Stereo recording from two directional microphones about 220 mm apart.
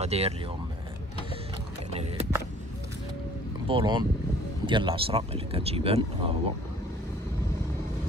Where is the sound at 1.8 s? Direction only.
30° right (ahead or behind).